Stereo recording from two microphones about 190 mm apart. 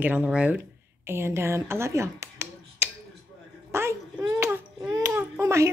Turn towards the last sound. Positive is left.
turn(degrees=-15)  # may be behind; listen again after turning